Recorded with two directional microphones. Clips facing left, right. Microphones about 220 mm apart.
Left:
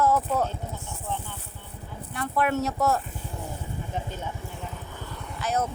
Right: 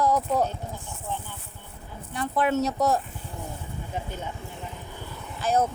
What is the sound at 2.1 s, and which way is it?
Speech, 20° right (ahead or behind).